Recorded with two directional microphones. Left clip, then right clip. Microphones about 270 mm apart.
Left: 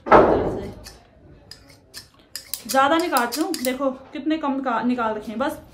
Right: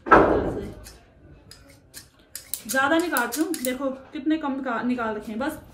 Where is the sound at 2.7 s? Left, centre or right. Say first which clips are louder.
Left 4 dB; centre.